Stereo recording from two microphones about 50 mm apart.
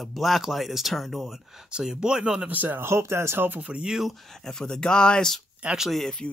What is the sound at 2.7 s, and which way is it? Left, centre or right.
Speech, right.